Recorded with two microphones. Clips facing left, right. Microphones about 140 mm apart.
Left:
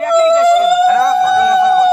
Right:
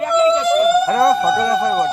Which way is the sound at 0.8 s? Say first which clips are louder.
Left 4 dB; 35° right (ahead or behind).